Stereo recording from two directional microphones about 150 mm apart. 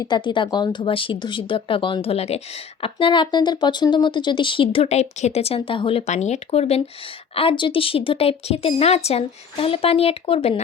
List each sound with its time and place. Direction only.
0.0 s speech: 30° left (ahead or behind)